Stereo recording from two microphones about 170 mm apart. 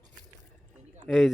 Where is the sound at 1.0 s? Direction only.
Centre (ahead or behind).